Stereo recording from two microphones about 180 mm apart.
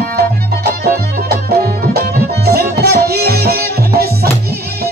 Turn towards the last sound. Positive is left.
turn(degrees=-60)  # may be behind; listen again after turning